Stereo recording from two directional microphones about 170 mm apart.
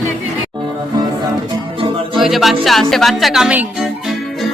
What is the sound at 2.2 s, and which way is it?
Music, centre (ahead or behind).